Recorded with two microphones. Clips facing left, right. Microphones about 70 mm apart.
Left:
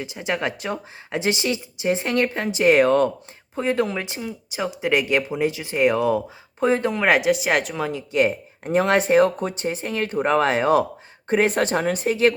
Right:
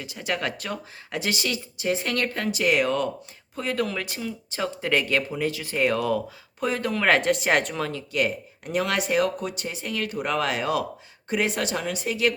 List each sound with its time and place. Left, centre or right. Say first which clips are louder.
0.0 s speech: left 3 dB; left
3.5 s speech: left 5 dB; left
8.1 s speech: left 7 dB; left